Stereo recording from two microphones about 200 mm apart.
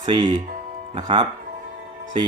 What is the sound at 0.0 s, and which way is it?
Speech, 25° right (ahead or behind).